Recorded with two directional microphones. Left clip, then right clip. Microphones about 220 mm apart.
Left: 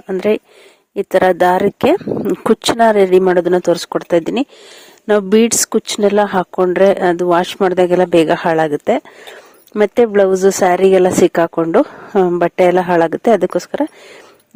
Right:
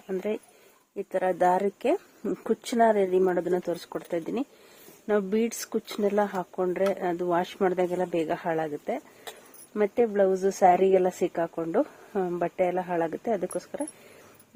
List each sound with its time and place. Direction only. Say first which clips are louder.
0.1 s speech: left 15 dB; 40° left (ahead or behind)